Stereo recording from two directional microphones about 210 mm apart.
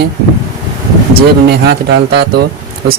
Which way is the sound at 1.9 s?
50° right (ahead or behind).